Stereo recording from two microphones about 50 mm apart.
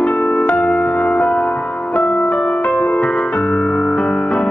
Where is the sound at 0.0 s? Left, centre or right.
Left.